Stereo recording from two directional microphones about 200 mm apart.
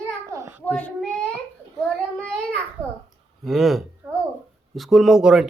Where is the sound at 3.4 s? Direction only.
Centre (ahead or behind).